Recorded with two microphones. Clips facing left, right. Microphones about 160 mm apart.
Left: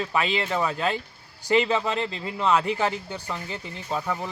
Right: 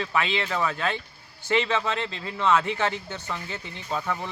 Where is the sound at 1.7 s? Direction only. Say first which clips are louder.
Left 2 dB; 35° left (ahead or behind).